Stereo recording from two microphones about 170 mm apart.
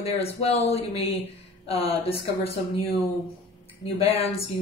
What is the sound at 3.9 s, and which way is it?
Speech, 35° left (ahead or behind).